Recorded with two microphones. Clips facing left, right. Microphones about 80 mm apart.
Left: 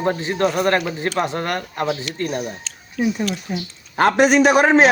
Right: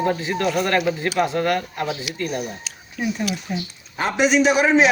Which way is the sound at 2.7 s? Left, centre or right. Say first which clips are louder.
Even; centre.